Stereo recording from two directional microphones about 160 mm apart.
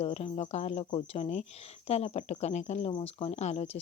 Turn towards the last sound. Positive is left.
turn(degrees=40)  # may be behind; listen again after turning